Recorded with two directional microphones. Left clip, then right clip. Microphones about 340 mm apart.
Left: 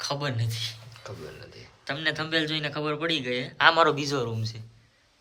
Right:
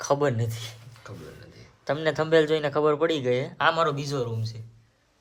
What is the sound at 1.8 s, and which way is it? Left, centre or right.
A man's voice, centre.